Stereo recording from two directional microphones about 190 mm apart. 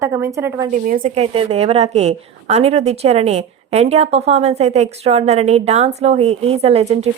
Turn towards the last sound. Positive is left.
turn(degrees=-35)  # may be behind; listen again after turning